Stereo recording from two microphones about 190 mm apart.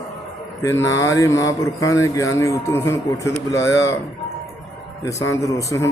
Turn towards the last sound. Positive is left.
turn(degrees=15)  # may be behind; listen again after turning